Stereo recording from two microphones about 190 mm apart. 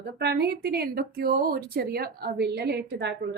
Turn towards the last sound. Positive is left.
turn(degrees=-60)  # may be behind; listen again after turning